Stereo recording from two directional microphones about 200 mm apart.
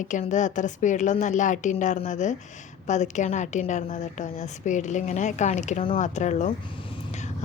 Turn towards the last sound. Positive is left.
turn(degrees=35)  # may be behind; listen again after turning